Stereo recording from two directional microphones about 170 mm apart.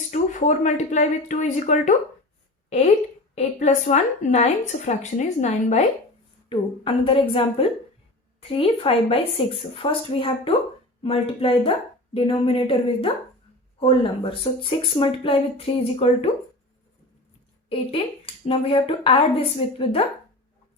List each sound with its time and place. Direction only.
0.1 s a woman's voice: 45° left (ahead or behind)
18.4 s speech: 35° left (ahead or behind)